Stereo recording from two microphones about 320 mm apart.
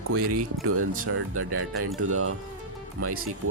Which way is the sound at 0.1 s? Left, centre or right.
Right.